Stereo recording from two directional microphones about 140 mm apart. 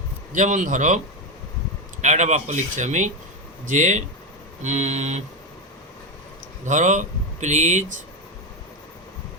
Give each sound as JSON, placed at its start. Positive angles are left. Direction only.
{"t": 0.3, "sound": "speech", "side_deg": -60}
{"t": 6.7, "sound": "speech", "side_deg": -60}